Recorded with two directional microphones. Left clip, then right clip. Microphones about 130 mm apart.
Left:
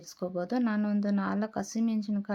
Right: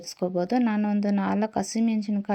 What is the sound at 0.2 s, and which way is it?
Speech, 15° right (ahead or behind).